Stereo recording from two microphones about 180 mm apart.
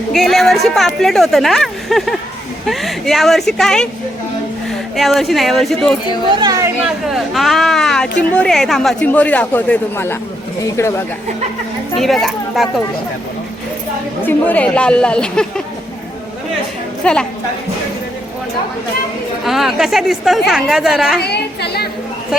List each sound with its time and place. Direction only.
0.1 s a woman's voice: centre (ahead or behind)
6.3 s chatter: 20° right (ahead or behind)
6.8 s a sound: centre (ahead or behind)
8.3 s speech: 5° left (ahead or behind)
11.9 s a woman's voice: centre (ahead or behind)
14.3 s a woman's voice: 10° left (ahead or behind)
17.0 s a woman's voice: 5° left (ahead or behind)
19.5 s a woman's voice: centre (ahead or behind)
21.2 s a woman's voice: 65° left (ahead or behind)